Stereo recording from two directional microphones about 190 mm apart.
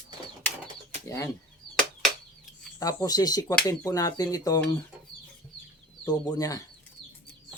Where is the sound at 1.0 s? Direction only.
15° left (ahead or behind).